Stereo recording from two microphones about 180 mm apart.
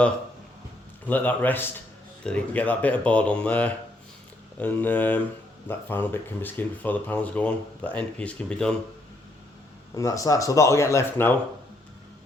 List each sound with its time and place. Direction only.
1.0 s speech: 10° left (ahead or behind)
9.9 s speech: 20° left (ahead or behind)